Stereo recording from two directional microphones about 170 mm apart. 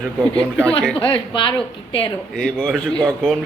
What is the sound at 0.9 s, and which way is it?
A woman's voice, 30° left (ahead or behind).